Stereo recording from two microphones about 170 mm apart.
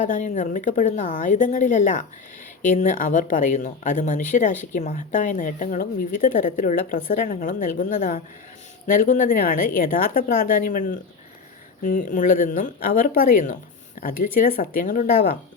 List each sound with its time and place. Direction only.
0.0 s speech: 45° left (ahead or behind)